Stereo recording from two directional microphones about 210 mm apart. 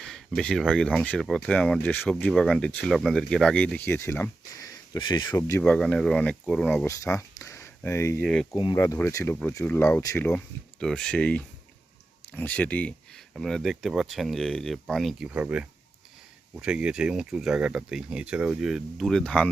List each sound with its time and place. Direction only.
0.0 s speech: centre (ahead or behind)
4.9 s speech: 20° left (ahead or behind); by 6.8 s 5° left (ahead or behind)
6.8 s speech: 15° left (ahead or behind)
8.5 s speech: 20° left (ahead or behind)